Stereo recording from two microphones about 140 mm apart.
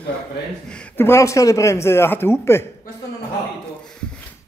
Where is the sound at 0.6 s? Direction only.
10° left (ahead or behind).